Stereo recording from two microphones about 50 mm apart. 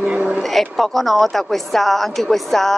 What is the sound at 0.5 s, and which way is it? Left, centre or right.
A man's voice, centre.